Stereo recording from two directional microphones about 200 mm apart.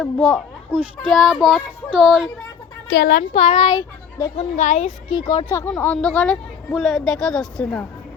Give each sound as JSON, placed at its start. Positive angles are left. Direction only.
{"t": 0.0, "sound": "a woman's voice", "side_deg": 0}
{"t": 2.9, "sound": "speech", "side_deg": 55}
{"t": 3.3, "sound": "a child's voice", "side_deg": 30}
{"t": 4.4, "sound": "speech", "side_deg": 35}
{"t": 5.1, "sound": "a woman's voice", "side_deg": 20}